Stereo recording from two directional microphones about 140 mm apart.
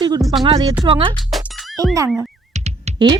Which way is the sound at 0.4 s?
40° right (ahead or behind).